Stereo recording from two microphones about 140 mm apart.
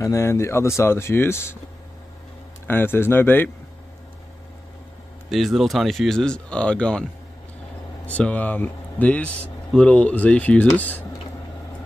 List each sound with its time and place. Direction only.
0.0 s speech: 20° left (ahead or behind)
2.6 s speech: 15° left (ahead or behind)
5.3 s speech: centre (ahead or behind)
8.1 s speech: 10° left (ahead or behind)